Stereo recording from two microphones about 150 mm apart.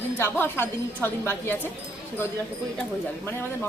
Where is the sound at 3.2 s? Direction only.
15° left (ahead or behind).